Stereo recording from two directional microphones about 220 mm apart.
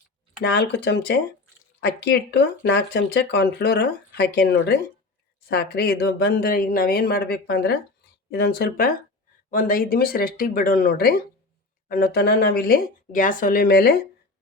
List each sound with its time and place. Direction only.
0.4 s speech: 50° left (ahead or behind)